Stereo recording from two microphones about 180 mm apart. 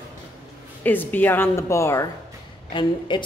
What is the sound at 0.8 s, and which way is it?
A woman's voice, 10° left (ahead or behind).